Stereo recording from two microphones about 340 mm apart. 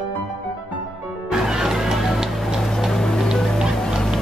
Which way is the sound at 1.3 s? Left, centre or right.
Centre.